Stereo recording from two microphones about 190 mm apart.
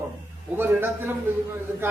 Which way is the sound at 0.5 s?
10° right (ahead or behind).